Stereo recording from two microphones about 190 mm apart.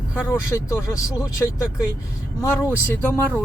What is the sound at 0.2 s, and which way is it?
Speech, 15° left (ahead or behind).